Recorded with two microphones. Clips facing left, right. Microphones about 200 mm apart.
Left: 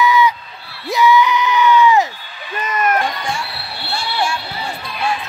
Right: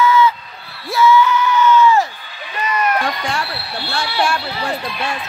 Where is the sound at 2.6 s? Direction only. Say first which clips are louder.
Even; 50° left (ahead or behind).